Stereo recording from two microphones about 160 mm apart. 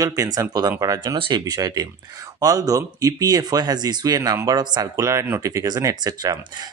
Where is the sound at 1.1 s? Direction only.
30° right (ahead or behind).